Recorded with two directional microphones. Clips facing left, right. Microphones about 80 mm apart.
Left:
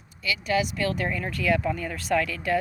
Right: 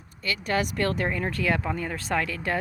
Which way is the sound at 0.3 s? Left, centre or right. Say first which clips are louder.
Left 1 dB; right.